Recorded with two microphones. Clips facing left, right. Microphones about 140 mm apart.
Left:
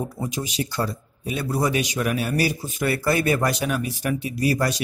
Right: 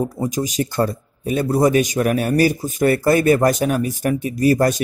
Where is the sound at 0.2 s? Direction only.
40° right (ahead or behind).